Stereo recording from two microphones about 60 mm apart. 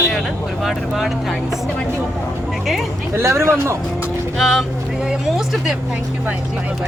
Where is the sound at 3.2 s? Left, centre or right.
Right.